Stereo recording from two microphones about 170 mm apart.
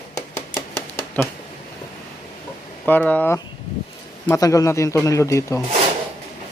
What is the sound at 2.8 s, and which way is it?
Speech, 10° left (ahead or behind).